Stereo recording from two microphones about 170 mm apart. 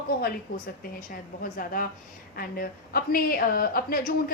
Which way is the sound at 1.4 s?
55° left (ahead or behind).